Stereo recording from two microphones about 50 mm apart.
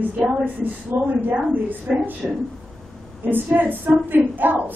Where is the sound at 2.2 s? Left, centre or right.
Centre.